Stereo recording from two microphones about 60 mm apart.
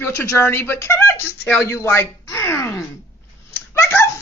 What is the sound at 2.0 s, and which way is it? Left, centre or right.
Speech, left.